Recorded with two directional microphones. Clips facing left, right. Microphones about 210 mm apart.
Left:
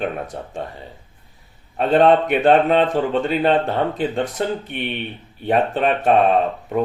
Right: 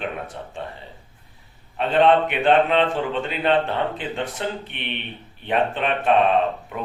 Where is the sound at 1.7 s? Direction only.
40° left (ahead or behind).